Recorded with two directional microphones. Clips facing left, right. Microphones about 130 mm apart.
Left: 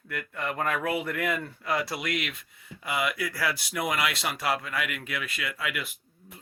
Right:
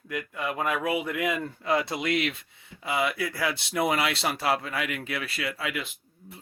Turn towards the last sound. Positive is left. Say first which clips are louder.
# right 2 dB
turn(degrees=-25)  # may be behind; listen again after turning